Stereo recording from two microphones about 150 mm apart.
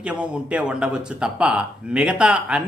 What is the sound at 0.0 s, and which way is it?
Speech, 5° right (ahead or behind).